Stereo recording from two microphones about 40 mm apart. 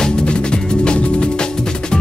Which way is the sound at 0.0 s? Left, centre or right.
Left.